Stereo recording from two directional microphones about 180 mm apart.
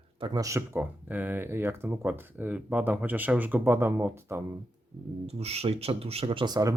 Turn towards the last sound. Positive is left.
turn(degrees=-20)  # may be behind; listen again after turning